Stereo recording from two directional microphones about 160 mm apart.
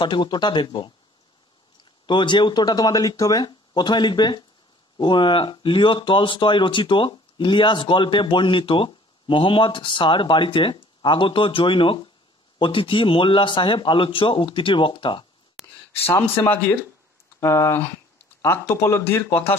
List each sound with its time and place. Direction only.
0.0 s speech: 30° left (ahead or behind)
2.0 s speech: 30° left (ahead or behind)
15.6 s a sound: centre (ahead or behind)
17.4 s speech: 15° left (ahead or behind)